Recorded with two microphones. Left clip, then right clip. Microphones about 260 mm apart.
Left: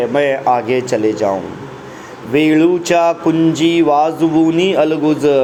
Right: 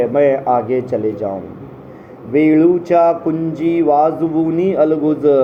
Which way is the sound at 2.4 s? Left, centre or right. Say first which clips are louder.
Even; left.